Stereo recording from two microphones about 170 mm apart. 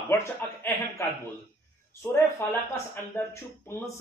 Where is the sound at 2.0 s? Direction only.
15° left (ahead or behind).